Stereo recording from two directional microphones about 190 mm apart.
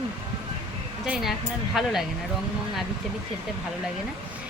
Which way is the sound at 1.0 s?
Centre (ahead or behind).